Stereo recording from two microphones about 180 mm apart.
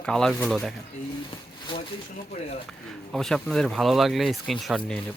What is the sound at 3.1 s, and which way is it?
Speech, centre (ahead or behind).